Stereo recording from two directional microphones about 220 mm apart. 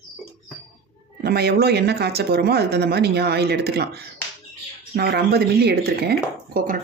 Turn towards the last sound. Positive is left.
turn(degrees=-40)  # may be behind; listen again after turning